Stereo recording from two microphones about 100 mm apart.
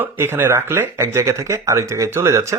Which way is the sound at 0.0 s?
20° right (ahead or behind).